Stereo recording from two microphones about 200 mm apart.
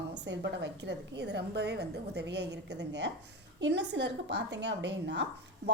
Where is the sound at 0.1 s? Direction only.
60° right (ahead or behind).